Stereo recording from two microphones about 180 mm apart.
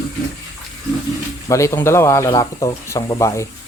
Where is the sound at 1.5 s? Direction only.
15° left (ahead or behind).